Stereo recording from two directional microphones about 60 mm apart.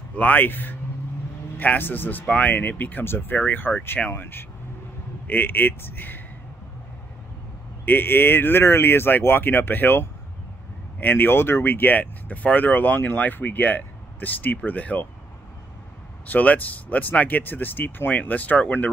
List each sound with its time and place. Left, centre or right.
0.1 s speech: left
7.8 s speech: left
16.3 s speech: left